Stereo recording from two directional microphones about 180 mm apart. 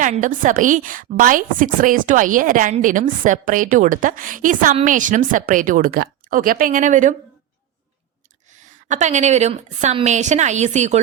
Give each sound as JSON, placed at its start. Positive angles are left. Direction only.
{"t": 0.0, "sound": "a woman's voice", "side_deg": -45}
{"t": 8.5, "sound": "a woman's voice", "side_deg": -40}